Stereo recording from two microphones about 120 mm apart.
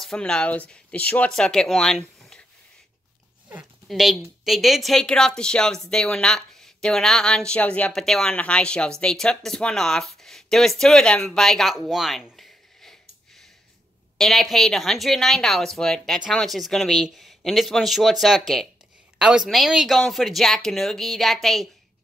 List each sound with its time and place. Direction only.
0.0 s speech: 5° left (ahead or behind)
3.8 s speech: centre (ahead or behind)
14.1 s speech: centre (ahead or behind)